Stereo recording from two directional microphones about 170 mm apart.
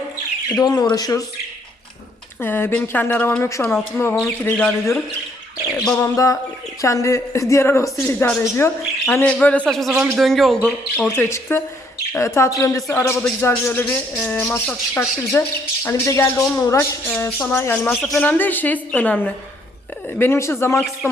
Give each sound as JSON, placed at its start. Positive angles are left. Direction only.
{"t": 0.5, "sound": "speech", "side_deg": 20}
{"t": 2.4, "sound": "speech", "side_deg": 15}
{"t": 5.7, "sound": "a sound", "side_deg": 5}
{"t": 6.0, "sound": "speech", "side_deg": 20}
{"t": 9.2, "sound": "a man's voice", "side_deg": 5}
{"t": 10.9, "sound": "speech", "side_deg": 15}